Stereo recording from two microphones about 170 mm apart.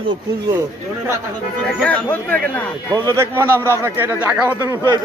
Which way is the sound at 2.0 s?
10° left (ahead or behind).